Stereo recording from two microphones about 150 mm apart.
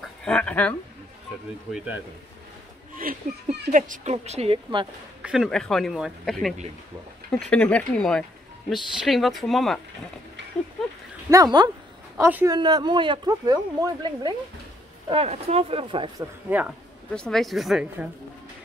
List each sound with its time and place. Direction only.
0.0 s speech: 5° left (ahead or behind)
1.7 s speech: 10° right (ahead or behind)
3.0 s speech: 65° right (ahead or behind); by 4.6 s 45° right (ahead or behind)
5.2 s speech: 5° right (ahead or behind)
11.2 s speech: 25° right (ahead or behind)
12.2 s speech: 10° right (ahead or behind)
12.4 s speech: 30° right (ahead or behind)
15.0 s speech: 40° right (ahead or behind)
17.1 s speech: 5° left (ahead or behind)